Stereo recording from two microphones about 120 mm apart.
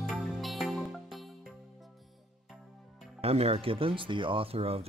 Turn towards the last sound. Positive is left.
turn(degrees=-55)  # may be behind; listen again after turning